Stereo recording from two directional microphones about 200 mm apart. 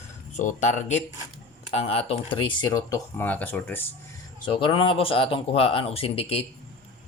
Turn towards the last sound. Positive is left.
turn(degrees=30)  # may be behind; listen again after turning